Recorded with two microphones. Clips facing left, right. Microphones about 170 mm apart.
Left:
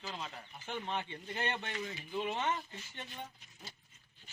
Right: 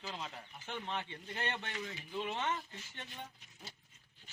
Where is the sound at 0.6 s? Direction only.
15° left (ahead or behind).